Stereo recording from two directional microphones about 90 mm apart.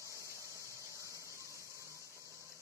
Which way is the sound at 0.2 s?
35° left (ahead or behind).